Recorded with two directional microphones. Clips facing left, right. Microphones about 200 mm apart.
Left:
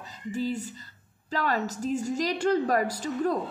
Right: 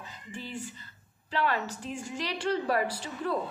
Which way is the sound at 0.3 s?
40° left (ahead or behind).